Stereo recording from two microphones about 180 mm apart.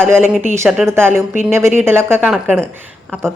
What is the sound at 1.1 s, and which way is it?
Speech, 40° left (ahead or behind).